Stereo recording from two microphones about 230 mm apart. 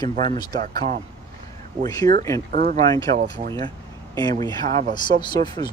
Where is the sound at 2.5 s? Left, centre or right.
Right.